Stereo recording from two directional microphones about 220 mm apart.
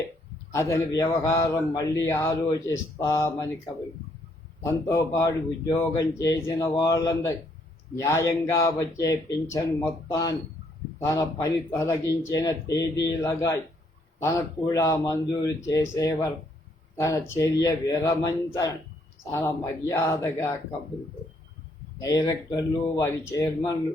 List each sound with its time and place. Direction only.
0.5 s speech: 15° left (ahead or behind)
4.6 s speech: 15° left (ahead or behind)
21.9 s speech: 15° left (ahead or behind)